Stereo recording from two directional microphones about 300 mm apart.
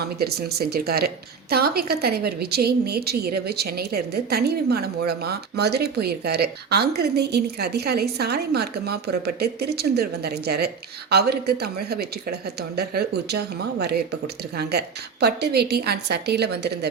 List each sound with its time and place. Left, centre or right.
0.2 s a woman's voice: right